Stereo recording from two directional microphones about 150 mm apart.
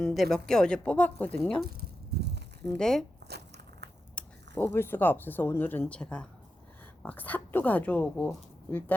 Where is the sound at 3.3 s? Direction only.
90° right.